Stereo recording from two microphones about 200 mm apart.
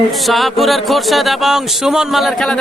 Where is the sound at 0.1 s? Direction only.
Centre (ahead or behind).